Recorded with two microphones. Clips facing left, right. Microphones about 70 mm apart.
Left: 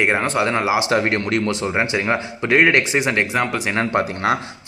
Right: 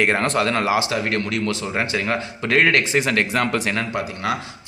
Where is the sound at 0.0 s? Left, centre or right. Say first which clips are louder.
Left 1 dB; centre.